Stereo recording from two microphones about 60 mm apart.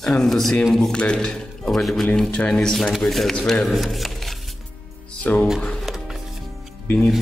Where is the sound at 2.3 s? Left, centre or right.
Centre.